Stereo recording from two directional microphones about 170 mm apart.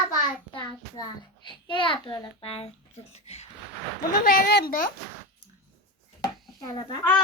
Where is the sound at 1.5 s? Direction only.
30° left (ahead or behind).